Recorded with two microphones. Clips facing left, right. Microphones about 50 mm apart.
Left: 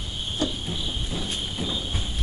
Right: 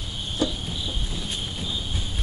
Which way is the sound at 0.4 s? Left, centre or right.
Centre.